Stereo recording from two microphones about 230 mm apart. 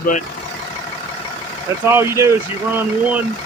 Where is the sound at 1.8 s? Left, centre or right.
Centre.